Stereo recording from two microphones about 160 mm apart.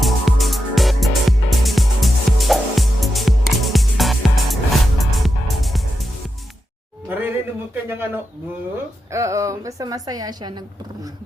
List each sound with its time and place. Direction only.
0.0 s music: centre (ahead or behind)
7.1 s a sound: 10° right (ahead or behind)
9.0 s a woman's voice: 20° right (ahead or behind)